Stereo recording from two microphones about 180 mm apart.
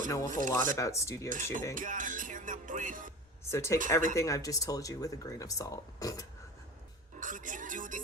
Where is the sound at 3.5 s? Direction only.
15° left (ahead or behind).